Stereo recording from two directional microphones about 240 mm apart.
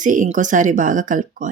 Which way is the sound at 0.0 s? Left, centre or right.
Right.